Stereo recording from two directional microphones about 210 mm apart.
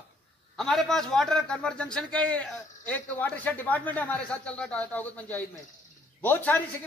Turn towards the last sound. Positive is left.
turn(degrees=10)  # may be behind; listen again after turning